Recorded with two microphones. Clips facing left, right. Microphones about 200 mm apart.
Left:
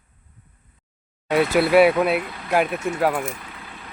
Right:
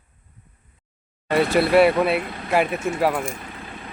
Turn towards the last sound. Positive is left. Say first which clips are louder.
# even
turn(degrees=5)  # may be behind; listen again after turning